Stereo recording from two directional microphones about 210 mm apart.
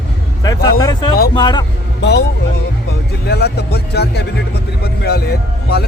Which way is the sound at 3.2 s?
50° left (ahead or behind).